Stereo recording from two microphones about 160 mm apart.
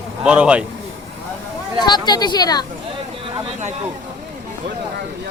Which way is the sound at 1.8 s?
25° left (ahead or behind).